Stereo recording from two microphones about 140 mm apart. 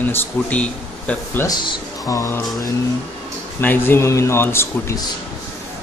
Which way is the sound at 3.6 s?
15° left (ahead or behind).